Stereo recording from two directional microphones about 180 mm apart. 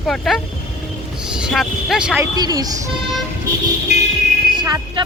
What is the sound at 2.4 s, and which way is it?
Speech, 20° right (ahead or behind).